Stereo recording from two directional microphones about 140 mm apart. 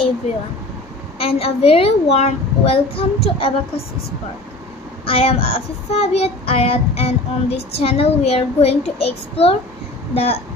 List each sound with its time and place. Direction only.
1.1 s child singing: 45° left (ahead or behind)
5.0 s child singing: 45° left (ahead or behind)